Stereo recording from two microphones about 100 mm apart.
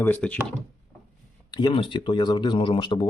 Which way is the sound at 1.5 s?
45° left (ahead or behind).